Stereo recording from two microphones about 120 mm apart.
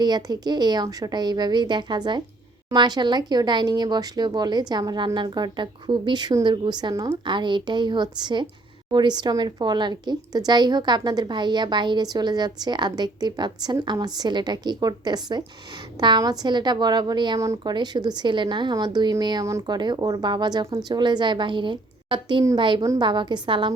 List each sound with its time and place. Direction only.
0.0 s a woman's voice: 35° right (ahead or behind)
22.8 s a woman's voice: 25° right (ahead or behind)
23.0 s a woman's voice: 40° right (ahead or behind)